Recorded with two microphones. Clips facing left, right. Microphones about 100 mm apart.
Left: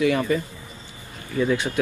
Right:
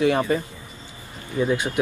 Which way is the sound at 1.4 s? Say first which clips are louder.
Even; 20° right (ahead or behind).